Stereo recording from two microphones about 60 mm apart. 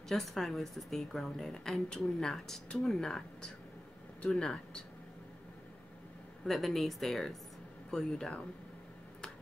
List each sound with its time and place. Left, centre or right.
0.1 s a woman's voice: centre
4.4 s speech: centre
6.4 s a woman's voice: centre